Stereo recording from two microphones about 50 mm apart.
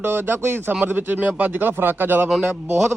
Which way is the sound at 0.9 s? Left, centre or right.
Right.